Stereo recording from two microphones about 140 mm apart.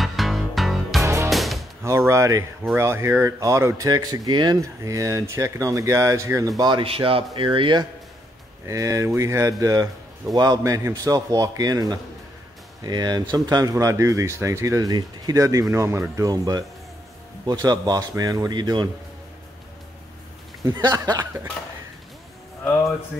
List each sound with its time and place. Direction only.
0.0 s music: centre (ahead or behind)
1.0 s music: 20° right (ahead or behind)
1.3 s music: centre (ahead or behind)
1.8 s a sound: 20° right (ahead or behind)
2.7 s speech: 20° right (ahead or behind); by 7.8 s 35° right (ahead or behind)
8.6 s speech: 25° right (ahead or behind)
20.6 s speech: 30° right (ahead or behind)